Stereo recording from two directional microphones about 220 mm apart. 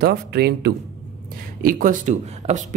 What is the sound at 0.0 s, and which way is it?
Speech, 45° right (ahead or behind).